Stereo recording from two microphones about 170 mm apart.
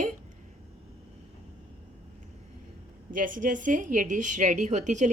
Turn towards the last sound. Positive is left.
turn(degrees=-45)  # may be behind; listen again after turning